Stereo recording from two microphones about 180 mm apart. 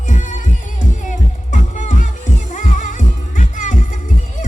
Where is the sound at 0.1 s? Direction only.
45° left (ahead or behind).